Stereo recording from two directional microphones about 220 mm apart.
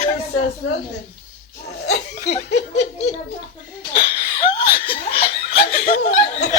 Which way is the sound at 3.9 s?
20° left (ahead or behind).